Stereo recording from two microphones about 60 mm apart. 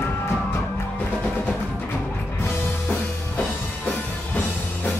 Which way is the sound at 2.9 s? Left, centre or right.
Left.